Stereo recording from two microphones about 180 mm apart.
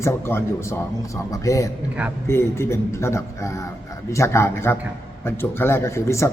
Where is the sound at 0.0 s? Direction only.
15° left (ahead or behind).